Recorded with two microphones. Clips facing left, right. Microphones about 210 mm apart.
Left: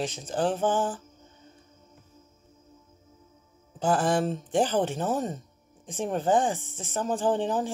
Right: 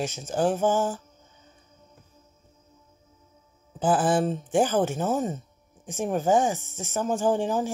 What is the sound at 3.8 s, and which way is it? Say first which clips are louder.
Speech: right 2 dB; 5° right (ahead or behind).